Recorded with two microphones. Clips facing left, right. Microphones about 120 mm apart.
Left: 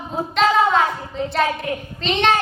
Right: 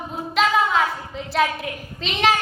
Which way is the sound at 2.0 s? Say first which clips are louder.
Left 2 dB; 5° right (ahead or behind).